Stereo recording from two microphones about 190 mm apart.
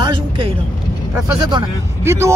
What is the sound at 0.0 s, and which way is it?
Vehicle, 30° right (ahead or behind).